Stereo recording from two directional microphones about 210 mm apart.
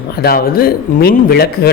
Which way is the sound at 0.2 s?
45° left (ahead or behind).